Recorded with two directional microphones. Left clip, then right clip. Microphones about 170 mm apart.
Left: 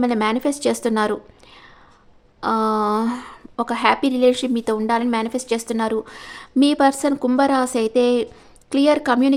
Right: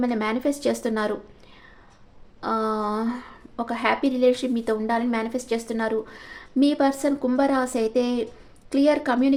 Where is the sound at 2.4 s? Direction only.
30° left (ahead or behind).